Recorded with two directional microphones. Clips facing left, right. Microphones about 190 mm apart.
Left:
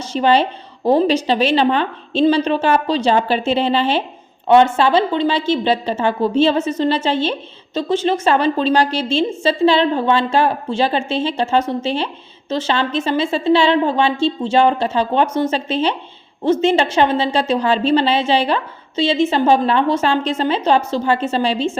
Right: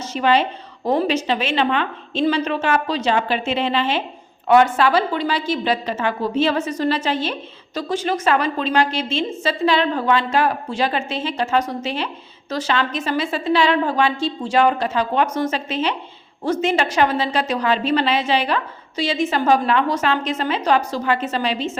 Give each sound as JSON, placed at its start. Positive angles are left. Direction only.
{"t": 0.0, "sound": "a woman's voice", "side_deg": 30}